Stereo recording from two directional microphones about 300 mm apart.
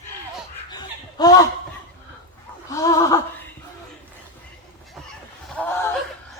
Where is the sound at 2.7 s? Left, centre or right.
Centre.